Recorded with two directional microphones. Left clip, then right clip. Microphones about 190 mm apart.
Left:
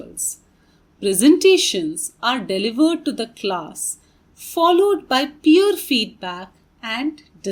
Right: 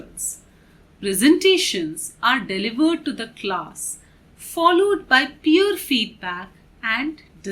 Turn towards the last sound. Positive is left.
turn(degrees=30)  # may be behind; listen again after turning